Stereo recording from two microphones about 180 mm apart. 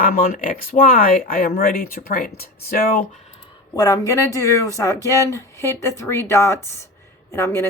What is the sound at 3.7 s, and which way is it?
Speech, 20° left (ahead or behind).